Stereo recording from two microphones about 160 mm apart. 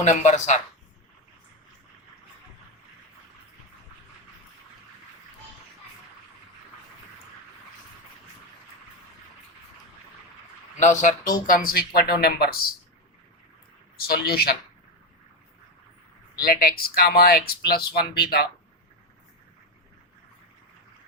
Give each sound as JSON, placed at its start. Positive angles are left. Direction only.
{"t": 0.0, "sound": "speech", "side_deg": 45}
{"t": 10.8, "sound": "speech", "side_deg": 50}
{"t": 13.9, "sound": "speech", "side_deg": 75}
{"t": 16.4, "sound": "speech", "side_deg": 70}